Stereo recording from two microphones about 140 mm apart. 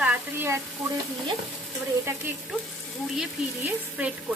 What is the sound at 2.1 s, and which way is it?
Speech, 20° right (ahead or behind).